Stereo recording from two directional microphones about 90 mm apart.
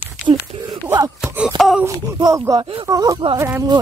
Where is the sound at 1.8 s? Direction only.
30° right (ahead or behind).